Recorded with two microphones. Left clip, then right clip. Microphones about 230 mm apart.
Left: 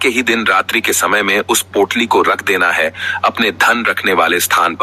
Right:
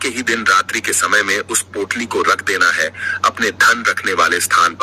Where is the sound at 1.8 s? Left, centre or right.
Centre.